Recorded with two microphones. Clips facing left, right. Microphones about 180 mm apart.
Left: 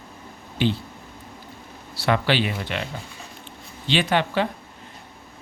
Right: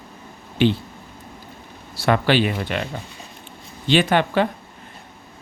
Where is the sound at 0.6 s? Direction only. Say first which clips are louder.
Right 5 dB; 70° right (ahead or behind).